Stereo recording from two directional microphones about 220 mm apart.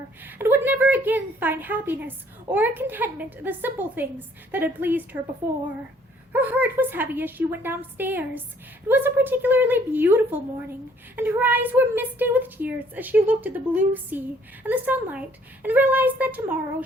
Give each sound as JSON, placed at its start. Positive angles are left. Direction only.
{"t": 0.3, "sound": "a woman's voice", "side_deg": -10}